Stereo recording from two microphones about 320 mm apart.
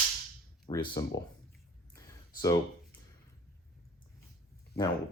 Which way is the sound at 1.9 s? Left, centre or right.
Centre.